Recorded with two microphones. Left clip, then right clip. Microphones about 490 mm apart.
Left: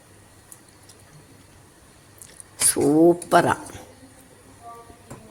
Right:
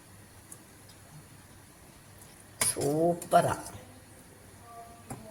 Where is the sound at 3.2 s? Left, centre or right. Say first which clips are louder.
Left 7 dB; centre.